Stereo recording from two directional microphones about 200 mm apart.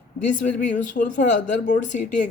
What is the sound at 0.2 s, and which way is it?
Speech, 40° left (ahead or behind).